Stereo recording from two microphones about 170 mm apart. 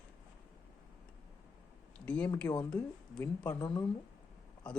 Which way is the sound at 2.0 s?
10° left (ahead or behind).